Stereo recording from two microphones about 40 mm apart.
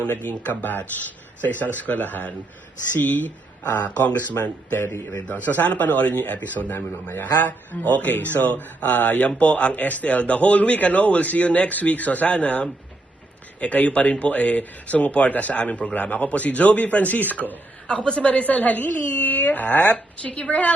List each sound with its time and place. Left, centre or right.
0.3 s speech: left
9.4 s speech: left
11.7 s speech: left
17.8 s speech: left
19.9 s speech: left